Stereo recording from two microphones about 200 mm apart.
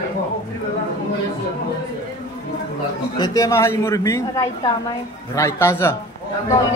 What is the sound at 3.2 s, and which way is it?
A man's voice, 15° left (ahead or behind).